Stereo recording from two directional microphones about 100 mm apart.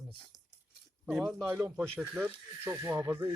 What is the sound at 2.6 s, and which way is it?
Speech, 30° right (ahead or behind).